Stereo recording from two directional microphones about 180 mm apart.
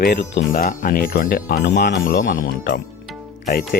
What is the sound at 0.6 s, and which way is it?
Speech, 50° left (ahead or behind).